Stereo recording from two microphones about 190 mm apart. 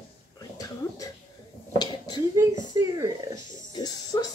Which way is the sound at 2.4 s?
15° right (ahead or behind).